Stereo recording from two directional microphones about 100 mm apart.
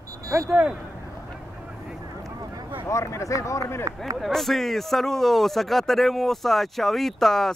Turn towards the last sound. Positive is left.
turn(degrees=5)  # may be behind; listen again after turning